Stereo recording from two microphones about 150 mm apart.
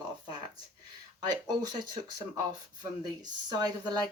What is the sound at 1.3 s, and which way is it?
Speech, 25° right (ahead or behind).